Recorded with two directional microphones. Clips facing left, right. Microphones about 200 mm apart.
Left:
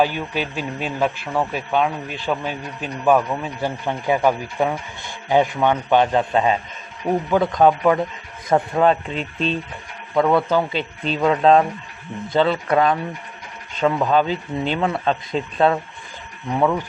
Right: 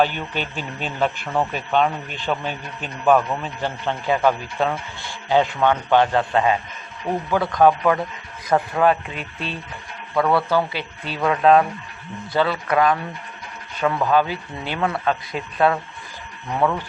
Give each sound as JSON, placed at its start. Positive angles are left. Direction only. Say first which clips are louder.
{"t": 0.0, "sound": "a man's voice", "louder": "left 1 dB", "side_deg": 5}
{"t": 16.6, "sound": "a man's voice", "louder": "left 2 dB", "side_deg": 10}